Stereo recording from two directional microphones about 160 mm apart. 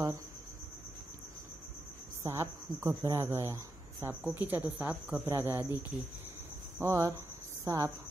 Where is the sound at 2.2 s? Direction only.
20° right (ahead or behind).